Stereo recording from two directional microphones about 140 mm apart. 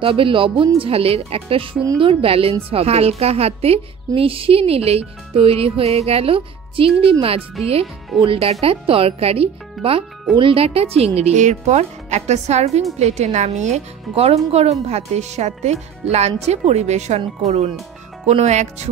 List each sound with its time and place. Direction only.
0.0 s a woman's voice: 40° right (ahead or behind)
9.8 s a child's voice: centre (ahead or behind)
10.3 s a woman's voice: 40° right (ahead or behind)